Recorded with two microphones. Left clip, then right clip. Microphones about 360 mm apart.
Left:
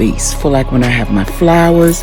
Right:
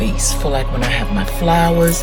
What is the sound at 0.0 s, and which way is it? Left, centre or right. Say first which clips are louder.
Music: left 6 dB; centre.